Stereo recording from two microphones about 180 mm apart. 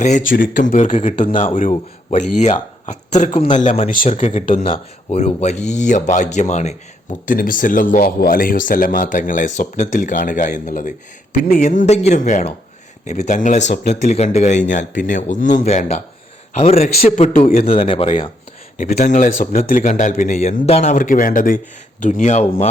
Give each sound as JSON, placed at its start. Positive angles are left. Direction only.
{"t": 0.3, "sound": "speech", "side_deg": 50}
{"t": 1.3, "sound": "speech", "side_deg": 30}
{"t": 2.0, "sound": "a man's voice", "side_deg": 40}
{"t": 5.1, "sound": "speech", "side_deg": 40}
{"t": 18.8, "sound": "speech", "side_deg": 45}